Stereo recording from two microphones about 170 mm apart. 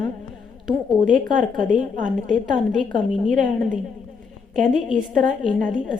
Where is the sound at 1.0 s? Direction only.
50° right (ahead or behind).